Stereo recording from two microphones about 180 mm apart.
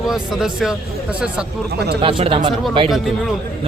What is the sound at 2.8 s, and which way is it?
Speech, centre (ahead or behind).